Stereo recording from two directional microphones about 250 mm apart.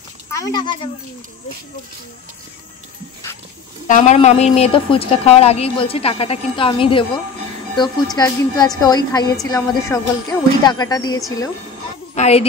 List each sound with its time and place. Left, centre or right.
0.3 s speech: centre
3.8 s a woman's voice: left; by 11.5 s centre
12.2 s a woman's voice: left